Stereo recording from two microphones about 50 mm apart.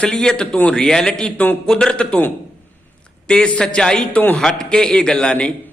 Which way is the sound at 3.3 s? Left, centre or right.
Left.